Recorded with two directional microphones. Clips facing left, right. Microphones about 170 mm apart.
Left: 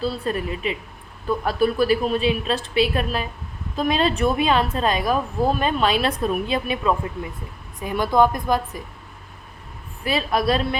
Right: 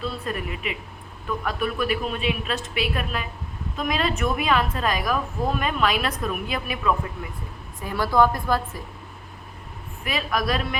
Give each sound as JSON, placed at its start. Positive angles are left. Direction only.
{"t": 0.0, "sound": "a woman's voice", "side_deg": 30}
{"t": 10.0, "sound": "a woman's voice", "side_deg": 30}